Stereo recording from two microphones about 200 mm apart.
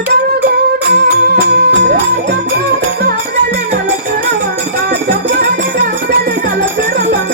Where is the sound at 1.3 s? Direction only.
50° right (ahead or behind).